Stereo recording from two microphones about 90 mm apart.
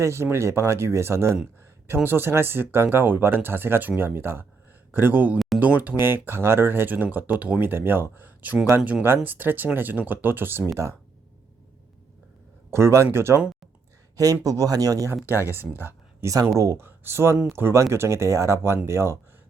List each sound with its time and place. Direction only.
0.0 s speech: 30° right (ahead or behind)
12.7 s speech: 30° right (ahead or behind)
14.4 s speech: 40° right (ahead or behind)
15.1 s speech: 25° right (ahead or behind)
16.2 s speech: 40° right (ahead or behind)